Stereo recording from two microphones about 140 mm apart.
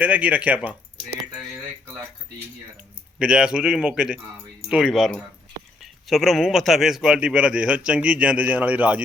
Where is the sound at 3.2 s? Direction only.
5° right (ahead or behind).